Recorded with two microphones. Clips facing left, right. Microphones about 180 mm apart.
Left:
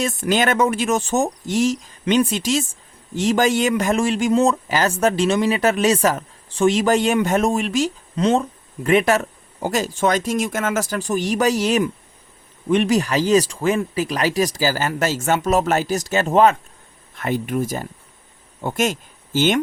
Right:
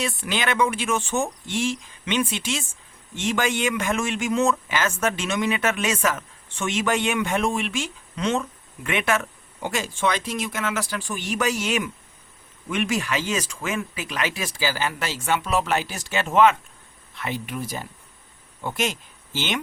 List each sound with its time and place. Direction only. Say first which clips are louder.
0.0 s speech: left 7 dB; 45° left (ahead or behind)